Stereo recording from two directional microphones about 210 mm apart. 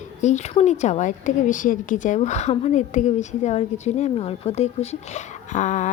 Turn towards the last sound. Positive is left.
turn(degrees=35)  # may be behind; listen again after turning